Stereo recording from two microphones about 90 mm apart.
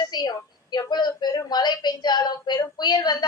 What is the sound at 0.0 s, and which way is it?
A woman's voice, 55° left (ahead or behind).